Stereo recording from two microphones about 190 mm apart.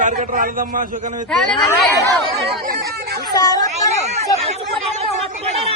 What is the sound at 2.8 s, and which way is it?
Speech, 55° right (ahead or behind).